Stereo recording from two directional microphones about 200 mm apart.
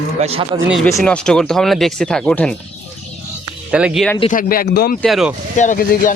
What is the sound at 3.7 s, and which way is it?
Speech, 5° right (ahead or behind).